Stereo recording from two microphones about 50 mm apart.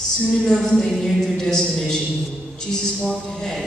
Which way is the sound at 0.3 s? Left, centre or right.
Centre.